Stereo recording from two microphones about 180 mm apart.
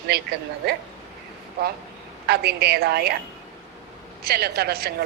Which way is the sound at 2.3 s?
65° right (ahead or behind).